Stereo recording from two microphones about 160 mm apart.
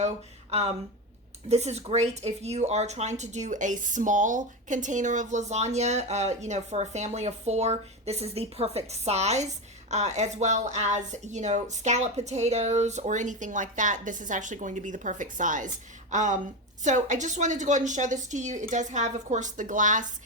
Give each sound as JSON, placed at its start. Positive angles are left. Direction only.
{"t": 0.5, "sound": "a woman's voice", "side_deg": -40}